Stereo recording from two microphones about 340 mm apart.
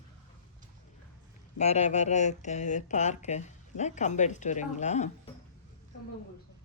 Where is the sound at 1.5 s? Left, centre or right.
Centre.